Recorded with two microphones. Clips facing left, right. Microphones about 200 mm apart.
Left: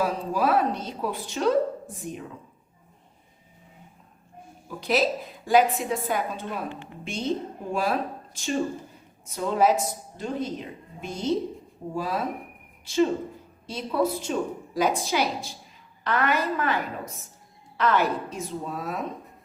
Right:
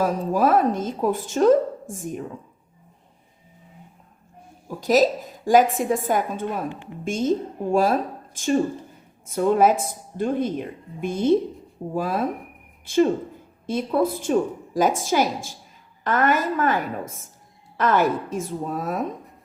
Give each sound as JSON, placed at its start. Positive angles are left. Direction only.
{"t": 0.0, "sound": "a woman's voice", "side_deg": -45}
{"t": 4.8, "sound": "a woman's voice", "side_deg": -40}